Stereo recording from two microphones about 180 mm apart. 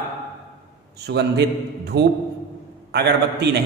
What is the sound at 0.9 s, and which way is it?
A man's voice, 65° right (ahead or behind).